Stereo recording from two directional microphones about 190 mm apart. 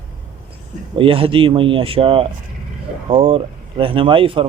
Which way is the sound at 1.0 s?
30° right (ahead or behind).